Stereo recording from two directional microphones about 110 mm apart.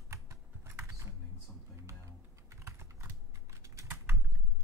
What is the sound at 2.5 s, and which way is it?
Typing, 25° right (ahead or behind).